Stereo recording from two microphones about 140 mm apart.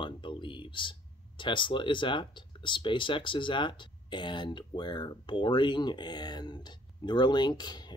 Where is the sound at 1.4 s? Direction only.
35° left (ahead or behind).